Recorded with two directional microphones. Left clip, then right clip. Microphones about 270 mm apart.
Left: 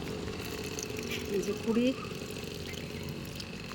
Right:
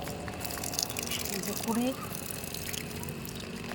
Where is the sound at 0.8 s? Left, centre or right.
Right.